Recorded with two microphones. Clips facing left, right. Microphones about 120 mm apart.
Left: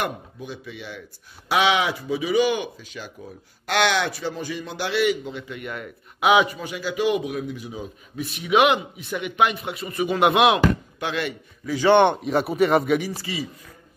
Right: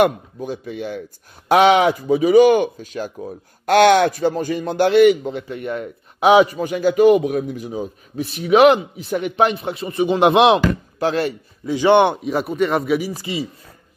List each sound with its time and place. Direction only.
0.4 s speech: 45° right (ahead or behind)
11.6 s a man's voice: 20° right (ahead or behind)
12.2 s speech: centre (ahead or behind)
13.1 s speech: 20° right (ahead or behind)